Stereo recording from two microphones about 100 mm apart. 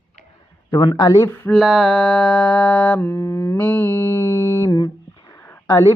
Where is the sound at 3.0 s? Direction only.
25° left (ahead or behind).